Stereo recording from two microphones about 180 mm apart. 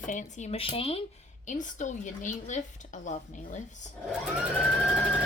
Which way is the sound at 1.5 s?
45° left (ahead or behind).